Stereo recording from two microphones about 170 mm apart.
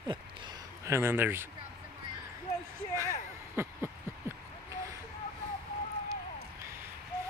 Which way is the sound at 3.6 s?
15° right (ahead or behind).